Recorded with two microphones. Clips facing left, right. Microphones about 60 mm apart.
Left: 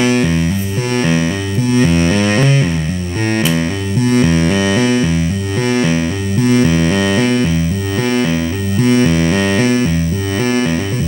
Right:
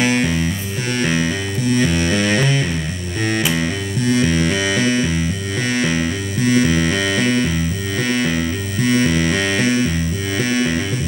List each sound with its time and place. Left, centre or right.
0.0 s music: left